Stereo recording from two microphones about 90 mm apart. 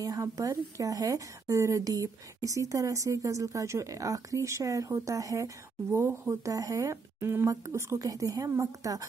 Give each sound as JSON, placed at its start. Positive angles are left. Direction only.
{"t": 0.0, "sound": "a woman's voice", "side_deg": -40}